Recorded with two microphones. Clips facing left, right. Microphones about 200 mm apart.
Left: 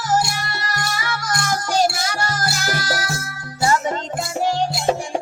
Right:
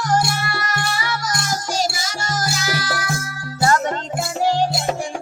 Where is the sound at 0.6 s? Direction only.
45° left (ahead or behind).